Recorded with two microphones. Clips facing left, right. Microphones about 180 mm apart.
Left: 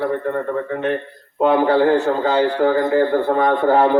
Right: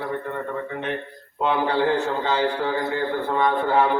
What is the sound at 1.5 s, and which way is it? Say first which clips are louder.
A man's voice: left 7 dB; 45° left (ahead or behind).